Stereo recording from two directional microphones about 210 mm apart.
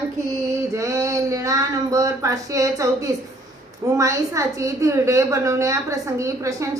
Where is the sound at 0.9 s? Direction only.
15° right (ahead or behind).